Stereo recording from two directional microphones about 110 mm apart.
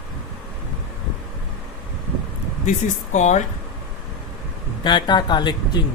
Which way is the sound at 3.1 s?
90° left.